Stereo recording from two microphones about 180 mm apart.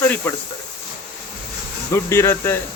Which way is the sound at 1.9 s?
15° left (ahead or behind).